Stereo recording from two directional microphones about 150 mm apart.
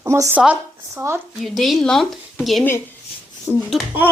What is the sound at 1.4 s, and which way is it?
Speech, centre (ahead or behind).